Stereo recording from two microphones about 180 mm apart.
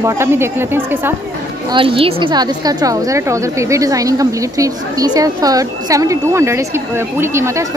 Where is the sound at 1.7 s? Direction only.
30° right (ahead or behind).